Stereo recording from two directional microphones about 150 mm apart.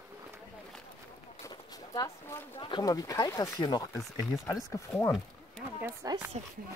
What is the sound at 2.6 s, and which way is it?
Speech, 30° left (ahead or behind).